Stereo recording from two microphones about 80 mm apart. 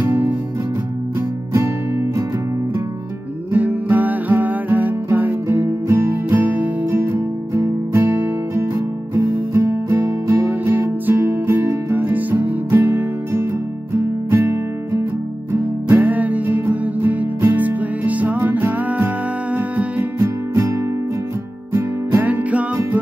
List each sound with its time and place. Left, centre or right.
0.0 s music: right
1.5 s music: right
3.5 s music: right
15.5 s music: right
20.2 s music: right
21.7 s music: right